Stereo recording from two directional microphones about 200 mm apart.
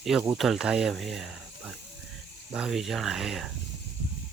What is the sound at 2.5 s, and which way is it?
Speech, centre (ahead or behind).